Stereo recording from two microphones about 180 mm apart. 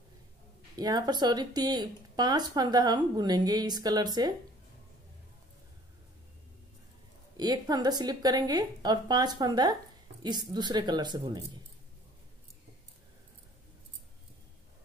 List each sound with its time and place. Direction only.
0.7 s speech: 20° right (ahead or behind)
7.3 s speech: 20° right (ahead or behind)